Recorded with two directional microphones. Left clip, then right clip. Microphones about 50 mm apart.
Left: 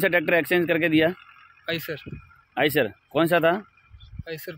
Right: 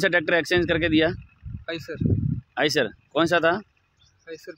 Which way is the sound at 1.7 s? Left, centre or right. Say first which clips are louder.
Left 2 dB; right.